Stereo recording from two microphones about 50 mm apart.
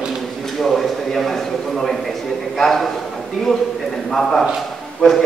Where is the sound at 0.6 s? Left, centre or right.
Centre.